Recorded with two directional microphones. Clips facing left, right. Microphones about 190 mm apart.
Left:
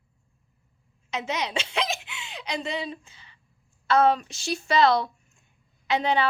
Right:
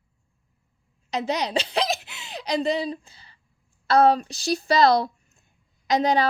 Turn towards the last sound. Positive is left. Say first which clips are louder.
# right 3 dB
turn(degrees=-40)  # may be behind; listen again after turning